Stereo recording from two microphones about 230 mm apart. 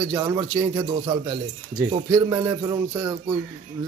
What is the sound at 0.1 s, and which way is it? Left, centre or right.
A man's voice, centre.